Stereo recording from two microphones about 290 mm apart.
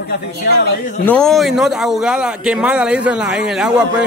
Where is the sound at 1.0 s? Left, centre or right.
Centre.